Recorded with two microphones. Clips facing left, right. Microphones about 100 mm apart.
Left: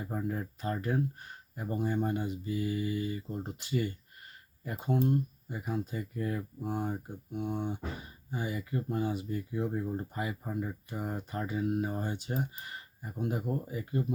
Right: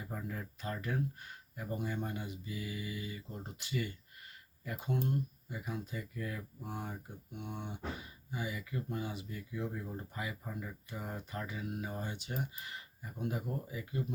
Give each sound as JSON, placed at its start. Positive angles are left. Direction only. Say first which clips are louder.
{"t": 0.0, "sound": "speech", "louder": "left 7 dB", "side_deg": 35}